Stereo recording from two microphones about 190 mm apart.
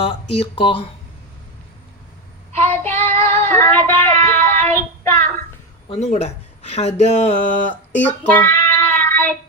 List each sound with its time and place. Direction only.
0.0 s speech: 30° left (ahead or behind)
2.5 s child singing: 10° left (ahead or behind)
5.9 s speech: 35° left (ahead or behind)
8.3 s child singing: 10° left (ahead or behind)